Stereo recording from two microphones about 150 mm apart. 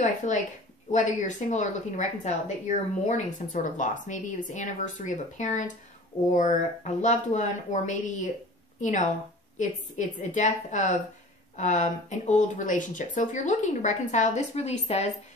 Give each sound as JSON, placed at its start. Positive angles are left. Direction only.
{"t": 0.0, "sound": "speech", "side_deg": 55}